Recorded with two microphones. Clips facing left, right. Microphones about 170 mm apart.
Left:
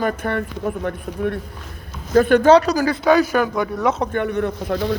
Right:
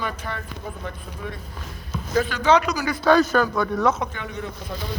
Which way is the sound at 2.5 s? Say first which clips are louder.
Left 6 dB; 40° left (ahead or behind).